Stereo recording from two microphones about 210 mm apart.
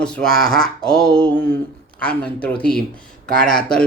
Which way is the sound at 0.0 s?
5° left (ahead or behind).